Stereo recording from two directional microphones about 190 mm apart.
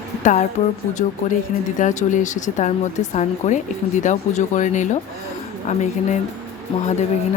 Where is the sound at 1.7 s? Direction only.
40° left (ahead or behind).